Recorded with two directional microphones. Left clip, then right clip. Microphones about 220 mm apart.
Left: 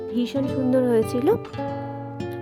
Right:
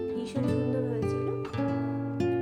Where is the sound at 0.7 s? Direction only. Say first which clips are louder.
Left 10 dB; 45° left (ahead or behind).